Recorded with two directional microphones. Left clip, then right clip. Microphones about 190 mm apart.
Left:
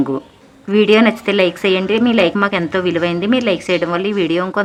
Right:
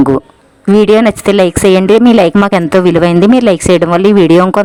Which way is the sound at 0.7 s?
45° right (ahead or behind).